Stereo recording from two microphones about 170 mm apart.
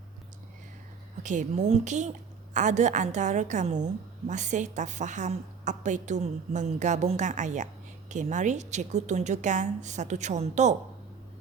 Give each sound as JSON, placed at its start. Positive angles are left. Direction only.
{"t": 1.2, "sound": "a woman's voice", "side_deg": -45}